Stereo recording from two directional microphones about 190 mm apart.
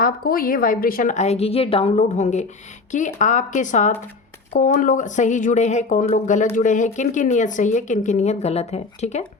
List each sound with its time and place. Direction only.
0.0 s speech: 50° left (ahead or behind)